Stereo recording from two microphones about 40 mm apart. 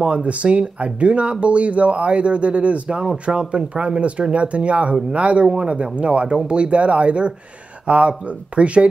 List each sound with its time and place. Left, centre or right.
0.0 s speech: right